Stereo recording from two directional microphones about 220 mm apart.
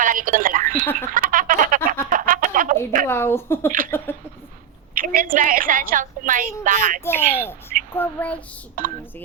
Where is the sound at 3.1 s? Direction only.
10° left (ahead or behind).